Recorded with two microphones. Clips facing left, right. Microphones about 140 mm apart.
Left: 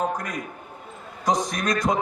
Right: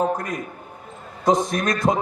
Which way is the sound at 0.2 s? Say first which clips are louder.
Right 3 dB; 30° right (ahead or behind).